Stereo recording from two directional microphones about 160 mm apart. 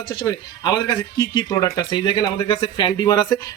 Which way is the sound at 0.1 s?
25° left (ahead or behind).